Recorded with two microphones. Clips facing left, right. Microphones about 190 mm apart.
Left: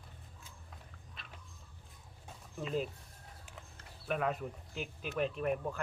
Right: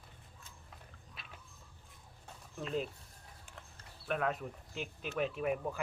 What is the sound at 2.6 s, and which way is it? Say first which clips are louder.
Speech: left 1 dB; centre (ahead or behind).